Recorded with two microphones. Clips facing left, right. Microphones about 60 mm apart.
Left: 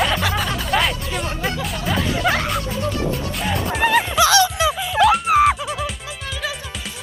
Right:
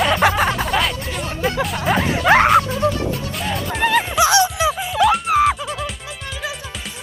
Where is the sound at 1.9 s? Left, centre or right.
Right.